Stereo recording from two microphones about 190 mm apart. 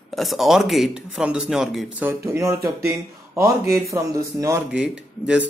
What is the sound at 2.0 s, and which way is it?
A man's voice, 10° right (ahead or behind).